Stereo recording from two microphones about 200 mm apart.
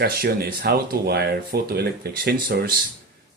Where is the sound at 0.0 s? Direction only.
50° right (ahead or behind).